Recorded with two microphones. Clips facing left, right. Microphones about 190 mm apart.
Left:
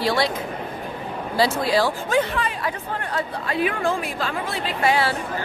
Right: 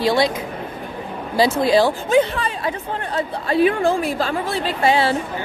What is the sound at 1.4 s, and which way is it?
A woman's voice, 20° right (ahead or behind).